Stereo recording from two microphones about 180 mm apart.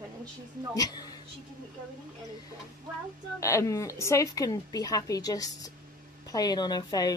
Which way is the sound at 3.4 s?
15° left (ahead or behind).